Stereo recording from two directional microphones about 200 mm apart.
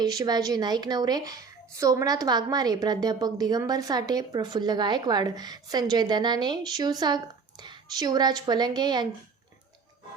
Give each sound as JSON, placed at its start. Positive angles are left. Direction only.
{"t": 0.0, "sound": "a woman's voice", "side_deg": -20}